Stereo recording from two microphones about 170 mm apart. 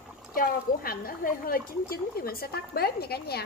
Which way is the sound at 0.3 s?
60° left (ahead or behind).